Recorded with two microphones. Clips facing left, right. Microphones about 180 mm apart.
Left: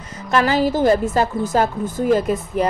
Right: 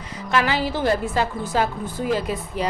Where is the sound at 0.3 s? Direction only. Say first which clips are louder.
Left 5 dB; 45° left (ahead or behind).